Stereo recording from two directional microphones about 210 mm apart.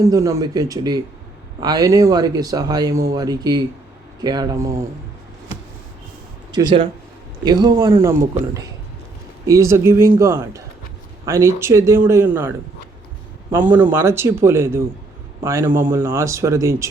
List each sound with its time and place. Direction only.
0.0 s speech: 15° right (ahead or behind)
6.5 s speech: 20° right (ahead or behind)
13.6 s speech: 10° right (ahead or behind)